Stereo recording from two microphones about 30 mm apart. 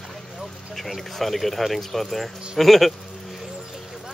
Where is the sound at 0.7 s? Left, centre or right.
Centre.